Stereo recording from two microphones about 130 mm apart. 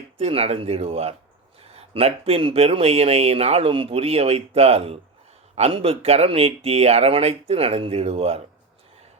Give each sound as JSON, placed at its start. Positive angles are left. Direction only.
{"t": 0.2, "sound": "speech", "side_deg": -50}